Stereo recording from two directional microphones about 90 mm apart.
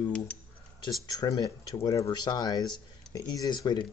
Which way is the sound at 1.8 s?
35° left (ahead or behind).